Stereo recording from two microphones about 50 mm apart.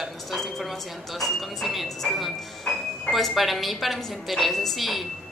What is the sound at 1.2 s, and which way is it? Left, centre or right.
A woman's voice, centre.